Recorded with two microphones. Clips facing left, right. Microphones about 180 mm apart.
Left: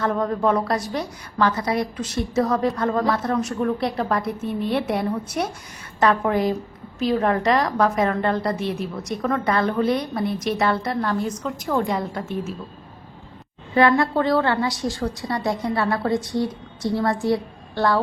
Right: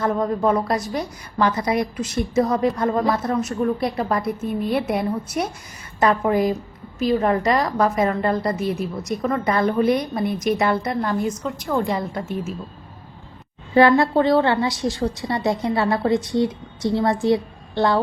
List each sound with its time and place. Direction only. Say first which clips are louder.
0.0 s a woman's voice: right 1 dB; 10° right (ahead or behind)
11.4 s a woman's voice: right 1 dB; centre (ahead or behind)
13.7 s a woman's voice: right 3 dB; 30° right (ahead or behind)